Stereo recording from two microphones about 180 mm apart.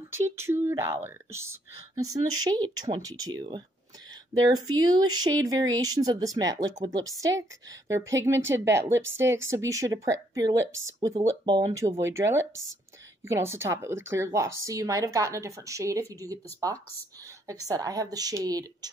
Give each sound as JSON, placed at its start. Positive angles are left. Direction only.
{"t": 0.1, "sound": "speech", "side_deg": -15}
{"t": 4.6, "sound": "speech", "side_deg": -20}